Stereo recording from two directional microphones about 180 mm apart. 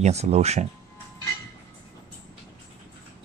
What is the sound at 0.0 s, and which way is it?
Speech, 35° right (ahead or behind).